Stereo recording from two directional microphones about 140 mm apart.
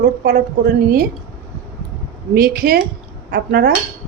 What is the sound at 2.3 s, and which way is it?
A woman's voice, 90° right.